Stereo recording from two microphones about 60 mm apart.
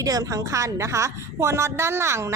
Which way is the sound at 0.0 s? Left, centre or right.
Right.